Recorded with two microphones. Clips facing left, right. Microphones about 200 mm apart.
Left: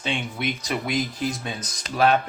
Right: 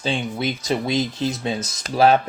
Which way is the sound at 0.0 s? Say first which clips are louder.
Right 4 dB; 30° right (ahead or behind).